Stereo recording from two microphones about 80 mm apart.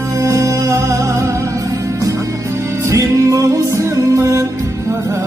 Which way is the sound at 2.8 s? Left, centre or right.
Right.